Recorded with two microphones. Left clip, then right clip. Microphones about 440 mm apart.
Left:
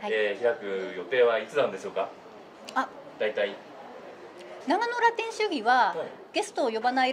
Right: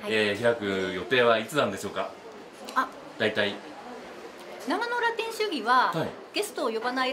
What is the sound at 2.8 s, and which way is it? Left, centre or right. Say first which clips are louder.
Speech: right 2 dB; left.